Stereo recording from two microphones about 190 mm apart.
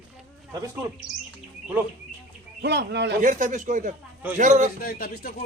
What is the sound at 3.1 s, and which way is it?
A man's voice, 40° right (ahead or behind).